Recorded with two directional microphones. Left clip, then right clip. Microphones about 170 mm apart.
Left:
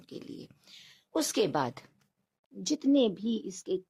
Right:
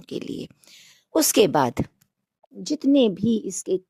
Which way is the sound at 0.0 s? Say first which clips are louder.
Right 13 dB; 50° right (ahead or behind).